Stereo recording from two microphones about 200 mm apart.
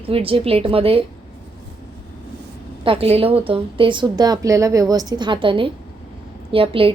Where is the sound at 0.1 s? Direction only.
30° right (ahead or behind).